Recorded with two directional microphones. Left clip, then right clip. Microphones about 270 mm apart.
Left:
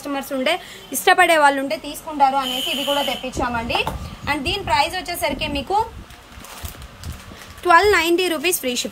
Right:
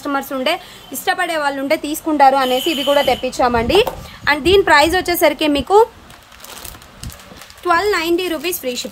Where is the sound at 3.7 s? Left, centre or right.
Centre.